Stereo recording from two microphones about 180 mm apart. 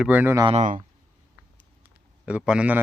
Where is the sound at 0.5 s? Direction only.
45° right (ahead or behind).